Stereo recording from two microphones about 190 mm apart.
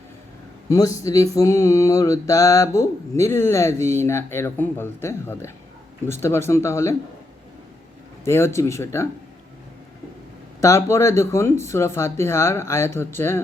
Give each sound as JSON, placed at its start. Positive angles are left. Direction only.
{"t": 0.7, "sound": "mantra", "side_deg": 20}
{"t": 8.2, "sound": "mantra", "side_deg": 15}
{"t": 10.6, "sound": "mantra", "side_deg": 15}